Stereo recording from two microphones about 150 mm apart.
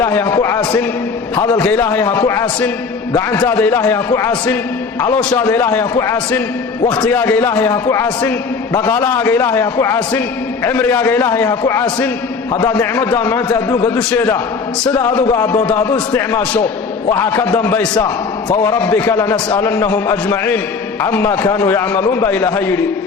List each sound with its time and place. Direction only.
0.0 s a man's voice: 15° left (ahead or behind)
17.9 s a man's voice: 25° left (ahead or behind)